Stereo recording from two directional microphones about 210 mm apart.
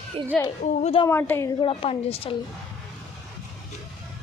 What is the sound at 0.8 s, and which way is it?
Speech, 25° left (ahead or behind).